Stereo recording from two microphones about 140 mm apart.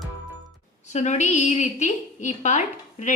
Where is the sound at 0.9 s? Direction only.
55° left (ahead or behind).